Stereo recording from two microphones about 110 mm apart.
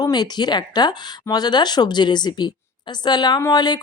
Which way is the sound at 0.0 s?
40° left (ahead or behind).